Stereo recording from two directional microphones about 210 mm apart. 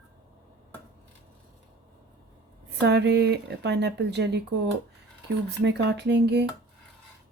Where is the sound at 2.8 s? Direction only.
55° right (ahead or behind).